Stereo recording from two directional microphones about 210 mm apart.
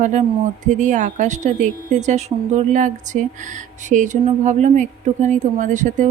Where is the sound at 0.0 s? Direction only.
35° right (ahead or behind).